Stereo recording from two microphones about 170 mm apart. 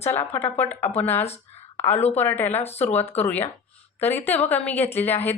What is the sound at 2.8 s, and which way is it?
Speech, 10° left (ahead or behind).